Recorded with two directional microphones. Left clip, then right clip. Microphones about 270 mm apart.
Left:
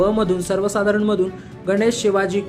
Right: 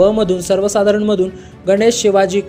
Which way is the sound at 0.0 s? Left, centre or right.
Centre.